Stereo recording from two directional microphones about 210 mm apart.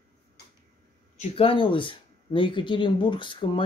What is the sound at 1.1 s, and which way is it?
Speech, 25° left (ahead or behind).